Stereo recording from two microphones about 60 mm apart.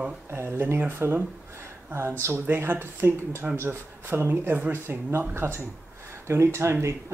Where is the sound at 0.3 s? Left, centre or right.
Right.